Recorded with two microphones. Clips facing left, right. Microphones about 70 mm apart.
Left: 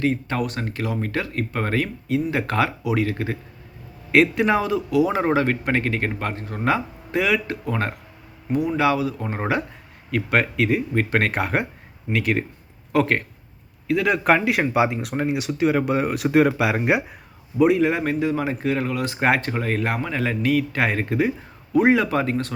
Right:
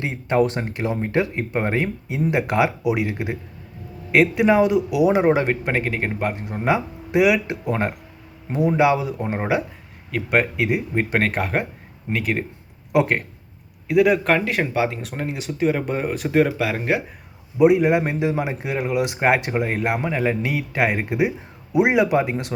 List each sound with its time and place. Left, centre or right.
0.0 s a man's voice: right
4.1 s speech: centre
4.6 s a man's voice: centre
9.4 s speech: centre
11.2 s a man's voice: centre
14.3 s speech: centre
17.6 s a man's voice: centre